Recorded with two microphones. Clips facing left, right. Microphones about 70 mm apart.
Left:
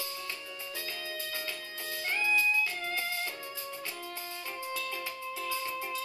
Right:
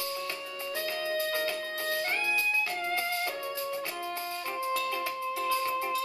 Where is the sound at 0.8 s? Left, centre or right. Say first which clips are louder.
Right 11 dB; right.